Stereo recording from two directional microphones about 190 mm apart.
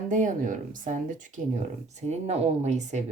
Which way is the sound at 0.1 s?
45° right (ahead or behind).